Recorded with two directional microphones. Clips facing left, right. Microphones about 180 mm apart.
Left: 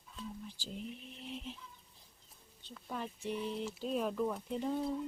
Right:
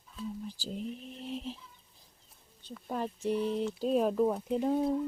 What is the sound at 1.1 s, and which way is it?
Bird, 35° right (ahead or behind).